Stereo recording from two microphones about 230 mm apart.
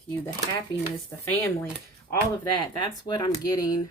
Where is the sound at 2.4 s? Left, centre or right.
Centre.